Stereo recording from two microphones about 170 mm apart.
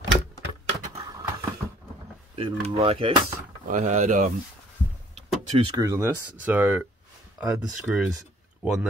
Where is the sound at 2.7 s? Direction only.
35° right (ahead or behind).